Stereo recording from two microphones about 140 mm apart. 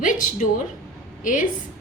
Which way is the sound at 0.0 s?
70° left (ahead or behind).